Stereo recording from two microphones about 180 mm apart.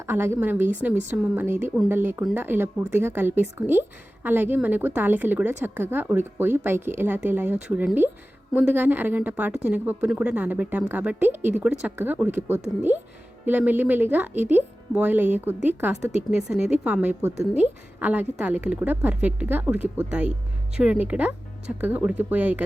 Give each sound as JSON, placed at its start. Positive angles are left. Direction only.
{"t": 0.1, "sound": "a woman's voice", "side_deg": -10}